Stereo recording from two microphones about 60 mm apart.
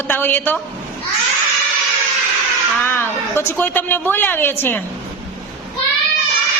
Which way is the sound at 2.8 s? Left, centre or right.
Left.